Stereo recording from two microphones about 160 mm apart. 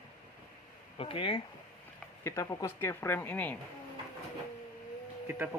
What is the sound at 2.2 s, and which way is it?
Speech, 20° left (ahead or behind).